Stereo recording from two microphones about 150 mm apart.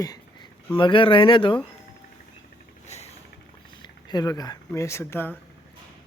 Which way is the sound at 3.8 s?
30° left (ahead or behind).